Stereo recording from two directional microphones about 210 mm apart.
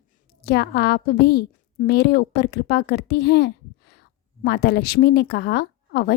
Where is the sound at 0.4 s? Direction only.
50° left (ahead or behind).